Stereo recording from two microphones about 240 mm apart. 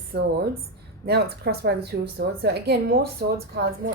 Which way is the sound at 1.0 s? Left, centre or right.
Right.